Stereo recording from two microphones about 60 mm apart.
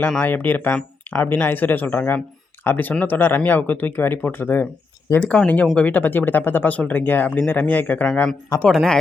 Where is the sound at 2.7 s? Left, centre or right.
Left.